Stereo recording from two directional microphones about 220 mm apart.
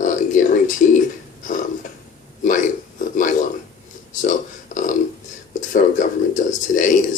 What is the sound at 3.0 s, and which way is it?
Speech, 35° left (ahead or behind).